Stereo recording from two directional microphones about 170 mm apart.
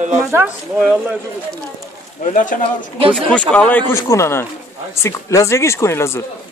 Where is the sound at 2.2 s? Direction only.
50° left (ahead or behind).